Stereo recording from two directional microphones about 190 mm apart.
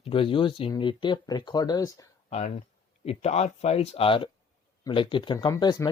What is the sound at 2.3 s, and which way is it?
Speech, 35° left (ahead or behind).